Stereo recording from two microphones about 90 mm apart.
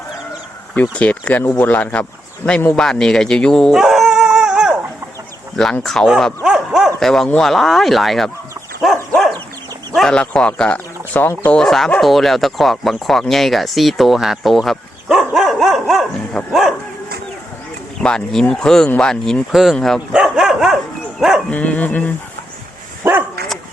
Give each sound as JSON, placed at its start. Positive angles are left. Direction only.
{"t": 0.7, "sound": "speech", "side_deg": 15}
{"t": 2.7, "sound": "howl", "side_deg": 5}
{"t": 5.8, "sound": "speech", "side_deg": 5}
{"t": 6.1, "sound": "dog", "side_deg": 0}
{"t": 7.0, "sound": "speech", "side_deg": 5}
{"t": 11.5, "sound": "speech", "side_deg": 5}
{"t": 18.0, "sound": "speech", "side_deg": 5}
{"t": 20.1, "sound": "dog", "side_deg": -5}
{"t": 21.5, "sound": "speech", "side_deg": 15}